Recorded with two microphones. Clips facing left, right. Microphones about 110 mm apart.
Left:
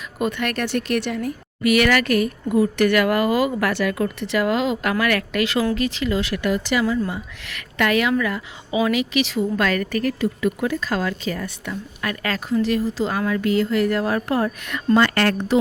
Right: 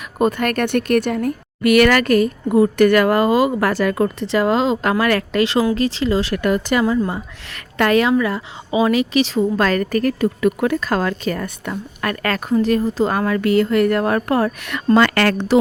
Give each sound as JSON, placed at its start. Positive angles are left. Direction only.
{"t": 0.2, "sound": "a woman's voice", "side_deg": -40}
{"t": 3.7, "sound": "speech", "side_deg": -40}
{"t": 6.3, "sound": "a woman's voice", "side_deg": -45}
{"t": 14.9, "sound": "a woman's voice", "side_deg": -90}